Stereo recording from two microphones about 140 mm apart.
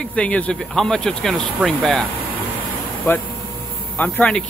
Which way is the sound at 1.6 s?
10° right (ahead or behind).